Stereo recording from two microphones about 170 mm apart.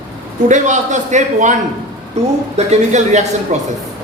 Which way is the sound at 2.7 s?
40° right (ahead or behind).